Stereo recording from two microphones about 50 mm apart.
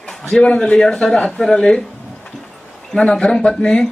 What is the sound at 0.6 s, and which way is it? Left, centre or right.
A man's voice, centre.